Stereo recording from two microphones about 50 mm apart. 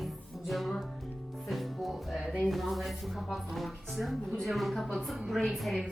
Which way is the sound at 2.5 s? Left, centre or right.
Centre.